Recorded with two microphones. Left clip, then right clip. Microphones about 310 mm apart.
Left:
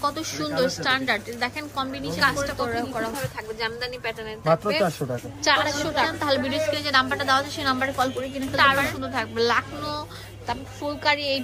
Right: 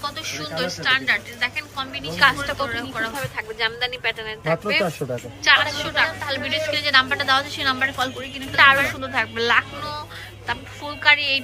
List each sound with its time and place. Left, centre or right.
0.0 s speech: centre